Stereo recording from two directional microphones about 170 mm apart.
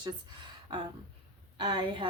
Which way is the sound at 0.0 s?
25° right (ahead or behind).